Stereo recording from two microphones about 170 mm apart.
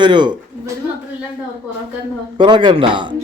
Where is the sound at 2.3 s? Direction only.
25° right (ahead or behind).